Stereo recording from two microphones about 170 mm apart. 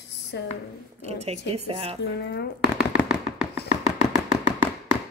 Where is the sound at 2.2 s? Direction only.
90° left.